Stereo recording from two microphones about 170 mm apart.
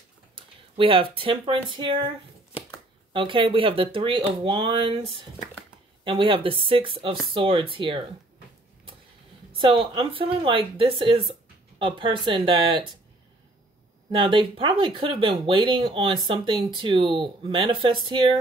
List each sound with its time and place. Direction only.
0.4 s speech: 30° right (ahead or behind)
9.5 s speech: 30° right (ahead or behind)
14.1 s speech: 30° right (ahead or behind)